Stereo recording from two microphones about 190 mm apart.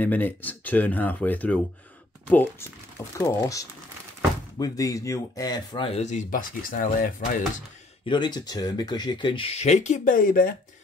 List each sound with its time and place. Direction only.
0.0 s speech: 10° left (ahead or behind); by 7.4 s 45° left (ahead or behind)
8.0 s speech: 25° left (ahead or behind); by 10.5 s 45° left (ahead or behind)